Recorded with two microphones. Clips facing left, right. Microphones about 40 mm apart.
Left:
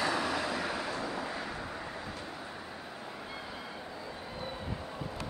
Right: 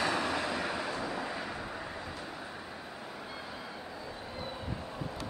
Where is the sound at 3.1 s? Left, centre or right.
Centre.